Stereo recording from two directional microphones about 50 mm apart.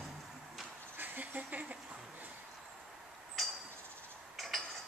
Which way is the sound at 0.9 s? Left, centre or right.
Right.